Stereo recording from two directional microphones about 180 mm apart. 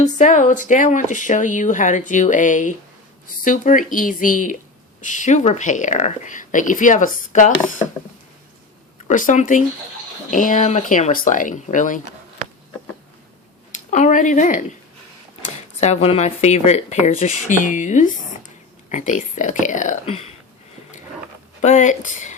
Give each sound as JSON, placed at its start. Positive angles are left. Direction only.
{"t": 0.0, "sound": "speech", "side_deg": 40}
{"t": 9.0, "sound": "speech", "side_deg": 45}
{"t": 13.7, "sound": "speech", "side_deg": 45}
{"t": 15.8, "sound": "speech", "side_deg": 35}
{"t": 20.1, "sound": "speech", "side_deg": 35}
{"t": 21.6, "sound": "speech", "side_deg": 40}